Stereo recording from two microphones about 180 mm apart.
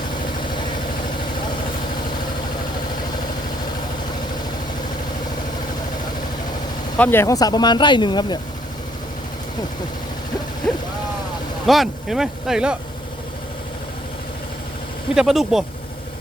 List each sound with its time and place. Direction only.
6.9 s speech: 10° left (ahead or behind); by 8.4 s 25° left (ahead or behind)
11.6 s speech: centre (ahead or behind)
15.1 s speech: centre (ahead or behind)